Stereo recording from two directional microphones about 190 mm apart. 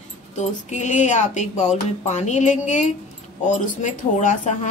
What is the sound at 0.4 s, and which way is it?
Speech, 40° left (ahead or behind).